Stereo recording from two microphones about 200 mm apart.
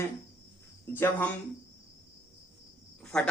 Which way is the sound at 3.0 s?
5° left (ahead or behind).